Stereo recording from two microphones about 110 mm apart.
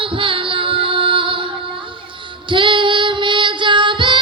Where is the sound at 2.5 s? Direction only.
50° right (ahead or behind).